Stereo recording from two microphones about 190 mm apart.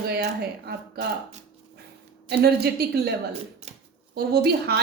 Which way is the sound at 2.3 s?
55° right (ahead or behind).